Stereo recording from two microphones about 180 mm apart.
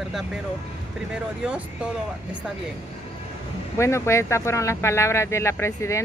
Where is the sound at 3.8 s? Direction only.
15° left (ahead or behind).